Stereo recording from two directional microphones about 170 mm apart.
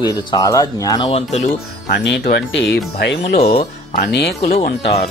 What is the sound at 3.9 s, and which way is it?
Speech, 75° left (ahead or behind).